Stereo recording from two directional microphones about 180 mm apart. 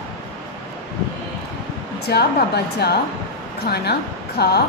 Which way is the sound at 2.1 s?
65° left (ahead or behind).